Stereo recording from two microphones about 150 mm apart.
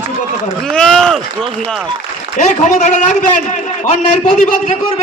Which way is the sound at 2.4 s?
55° left (ahead or behind).